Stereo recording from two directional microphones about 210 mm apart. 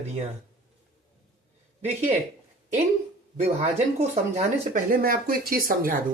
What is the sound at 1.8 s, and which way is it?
Speech, 30° right (ahead or behind).